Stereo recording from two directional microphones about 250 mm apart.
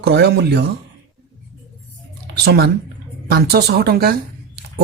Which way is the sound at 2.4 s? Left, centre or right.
Right.